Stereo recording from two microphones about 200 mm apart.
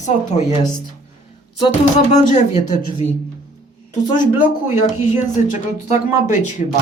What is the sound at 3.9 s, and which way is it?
Speech, 40° left (ahead or behind).